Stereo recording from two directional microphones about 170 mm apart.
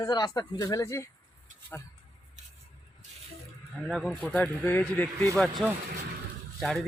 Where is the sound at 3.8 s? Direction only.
Centre (ahead or behind).